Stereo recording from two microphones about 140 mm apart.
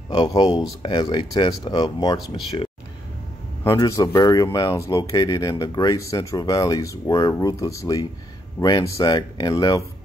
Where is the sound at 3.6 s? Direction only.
20° left (ahead or behind).